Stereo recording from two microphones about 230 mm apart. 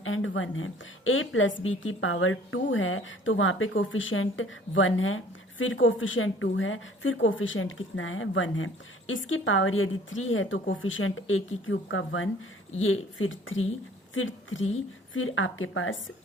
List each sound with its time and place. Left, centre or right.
0.0 s a woman's voice: left